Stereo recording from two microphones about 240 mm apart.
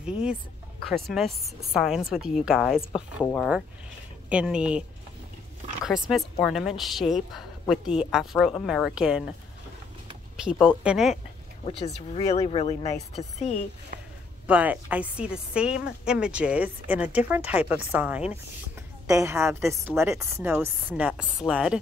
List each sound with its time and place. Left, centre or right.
0.0 s a woman's voice: centre
5.9 s a woman's voice: centre
10.3 s a woman's voice: centre
11.6 s speech: left
13.9 s a sound: right
14.4 s a woman's voice: centre